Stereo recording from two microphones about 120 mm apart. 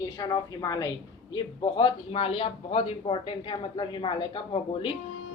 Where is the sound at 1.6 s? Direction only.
45° left (ahead or behind).